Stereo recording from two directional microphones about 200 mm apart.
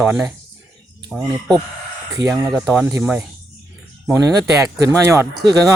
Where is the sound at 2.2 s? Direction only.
10° right (ahead or behind).